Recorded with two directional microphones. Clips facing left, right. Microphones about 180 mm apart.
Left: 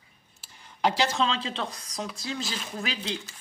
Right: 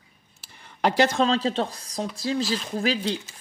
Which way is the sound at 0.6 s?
55° right (ahead or behind).